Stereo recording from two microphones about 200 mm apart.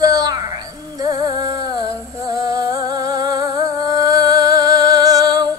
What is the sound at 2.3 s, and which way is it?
Music, 20° right (ahead or behind).